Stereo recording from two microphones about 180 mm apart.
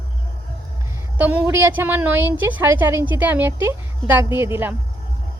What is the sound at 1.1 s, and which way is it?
A woman's voice, 10° right (ahead or behind).